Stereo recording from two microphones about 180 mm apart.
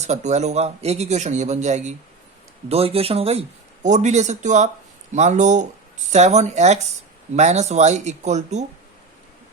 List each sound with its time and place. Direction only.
0.0 s speech: 40° right (ahead or behind)